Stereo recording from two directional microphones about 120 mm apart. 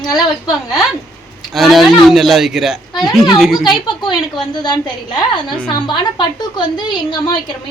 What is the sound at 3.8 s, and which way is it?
A woman's voice, 40° left (ahead or behind).